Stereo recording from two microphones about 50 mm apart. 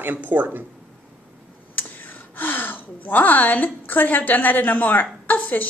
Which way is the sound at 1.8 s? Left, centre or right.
Left.